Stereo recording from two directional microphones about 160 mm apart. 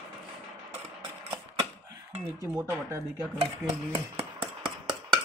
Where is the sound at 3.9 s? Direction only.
35° right (ahead or behind).